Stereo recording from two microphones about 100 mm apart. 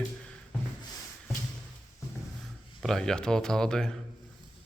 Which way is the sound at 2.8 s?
5° left (ahead or behind).